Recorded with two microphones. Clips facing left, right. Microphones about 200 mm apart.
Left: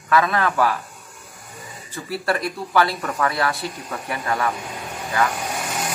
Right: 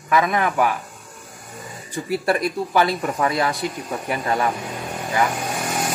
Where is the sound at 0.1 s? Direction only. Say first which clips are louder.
Even; 15° right (ahead or behind).